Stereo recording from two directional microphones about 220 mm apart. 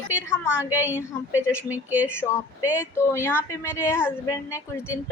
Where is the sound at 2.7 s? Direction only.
10° left (ahead or behind).